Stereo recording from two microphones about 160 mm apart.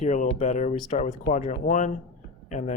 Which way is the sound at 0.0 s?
50° left (ahead or behind).